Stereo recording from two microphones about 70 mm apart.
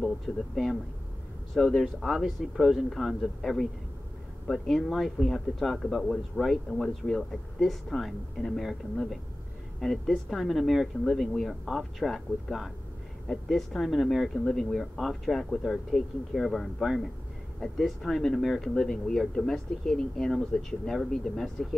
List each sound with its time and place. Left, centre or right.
0.3 s speech: centre
1.5 s speech: centre
1.8 s speech: centre